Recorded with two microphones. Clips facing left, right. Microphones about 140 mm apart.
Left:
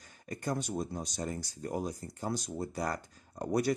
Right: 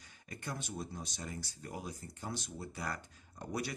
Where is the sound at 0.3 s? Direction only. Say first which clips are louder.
Left 8 dB; 40° left (ahead or behind).